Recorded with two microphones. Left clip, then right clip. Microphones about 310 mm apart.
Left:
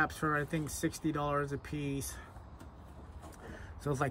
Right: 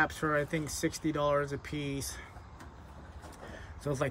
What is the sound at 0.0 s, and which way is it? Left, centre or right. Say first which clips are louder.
Speech: right 3 dB; centre.